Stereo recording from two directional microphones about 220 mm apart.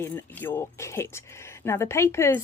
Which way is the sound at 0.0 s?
10° left (ahead or behind).